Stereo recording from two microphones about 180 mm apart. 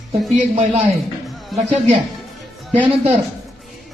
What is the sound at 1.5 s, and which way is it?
Speech, centre (ahead or behind).